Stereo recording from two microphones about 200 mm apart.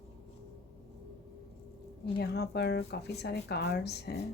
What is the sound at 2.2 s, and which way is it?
Speech, 55° left (ahead or behind).